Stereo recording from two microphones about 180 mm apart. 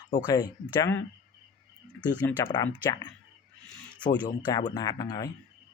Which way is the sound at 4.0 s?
25° left (ahead or behind).